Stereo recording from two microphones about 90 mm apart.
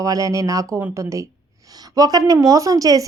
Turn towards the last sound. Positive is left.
turn(degrees=-40)  # may be behind; listen again after turning